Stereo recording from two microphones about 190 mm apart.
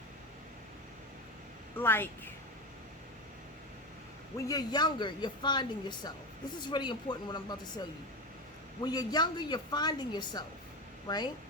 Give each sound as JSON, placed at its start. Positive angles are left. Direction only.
{"t": 1.8, "sound": "speech", "side_deg": 10}
{"t": 4.4, "sound": "speech", "side_deg": 20}
{"t": 8.8, "sound": "speech", "side_deg": 20}